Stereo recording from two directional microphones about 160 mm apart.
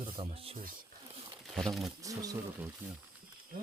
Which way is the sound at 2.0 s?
20° right (ahead or behind).